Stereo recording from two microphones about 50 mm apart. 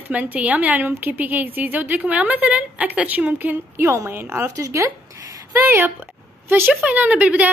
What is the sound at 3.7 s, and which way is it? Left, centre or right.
Speech, right.